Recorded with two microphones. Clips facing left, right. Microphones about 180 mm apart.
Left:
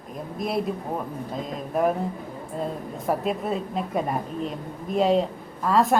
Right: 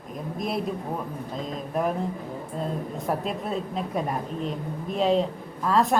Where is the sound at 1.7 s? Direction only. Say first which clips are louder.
Left 4 dB; centre (ahead or behind).